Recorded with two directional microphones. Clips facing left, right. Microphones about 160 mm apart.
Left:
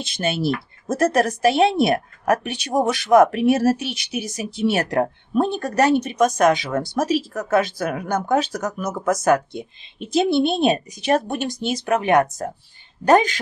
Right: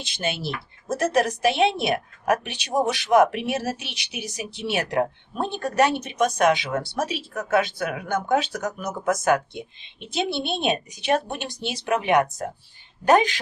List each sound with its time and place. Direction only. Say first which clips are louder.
0.0 s a woman's voice: left 6 dB; 50° left (ahead or behind)